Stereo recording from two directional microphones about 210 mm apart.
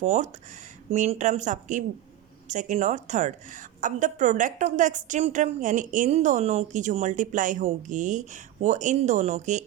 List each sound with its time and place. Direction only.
0.0 s a woman's voice: 35° right (ahead or behind)